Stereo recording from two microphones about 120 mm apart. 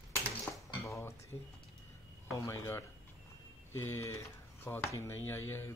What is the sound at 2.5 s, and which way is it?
Speech, 20° left (ahead or behind).